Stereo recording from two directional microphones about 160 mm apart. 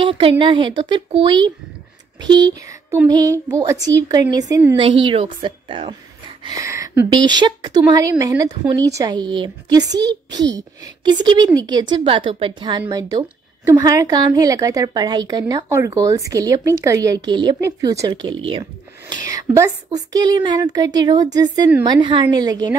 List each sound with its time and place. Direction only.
0.0 s a woman's voice: 35° right (ahead or behind)
4.7 s speech: 30° right (ahead or behind)
6.4 s a woman's voice: 20° right (ahead or behind)